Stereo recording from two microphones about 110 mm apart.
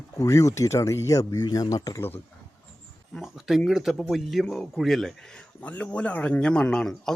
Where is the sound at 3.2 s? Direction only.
5° right (ahead or behind).